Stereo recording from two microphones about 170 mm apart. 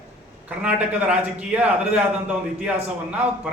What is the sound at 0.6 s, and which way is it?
A man's voice, 10° right (ahead or behind).